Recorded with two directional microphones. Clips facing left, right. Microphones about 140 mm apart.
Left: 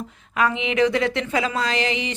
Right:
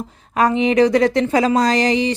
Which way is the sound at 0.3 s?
40° right (ahead or behind).